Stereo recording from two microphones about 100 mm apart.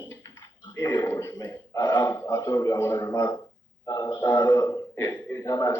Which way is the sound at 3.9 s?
35° left (ahead or behind).